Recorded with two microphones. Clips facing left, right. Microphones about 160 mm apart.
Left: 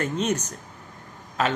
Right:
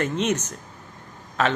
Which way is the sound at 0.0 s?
35° left (ahead or behind).